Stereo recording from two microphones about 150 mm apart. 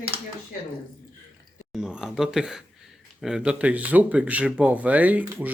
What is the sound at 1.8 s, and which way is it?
Speech, 5° right (ahead or behind).